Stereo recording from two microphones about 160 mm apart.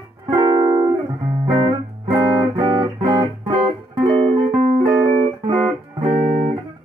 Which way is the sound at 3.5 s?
35° right (ahead or behind).